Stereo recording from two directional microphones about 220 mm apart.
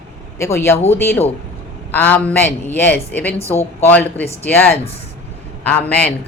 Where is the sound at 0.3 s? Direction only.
10° left (ahead or behind).